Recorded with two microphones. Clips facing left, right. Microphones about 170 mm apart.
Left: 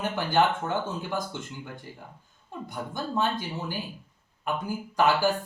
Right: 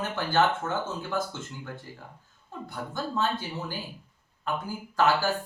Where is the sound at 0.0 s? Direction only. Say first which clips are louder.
Left 1 dB; 15° left (ahead or behind).